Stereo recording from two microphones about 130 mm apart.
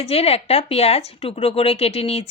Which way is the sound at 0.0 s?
50° left (ahead or behind).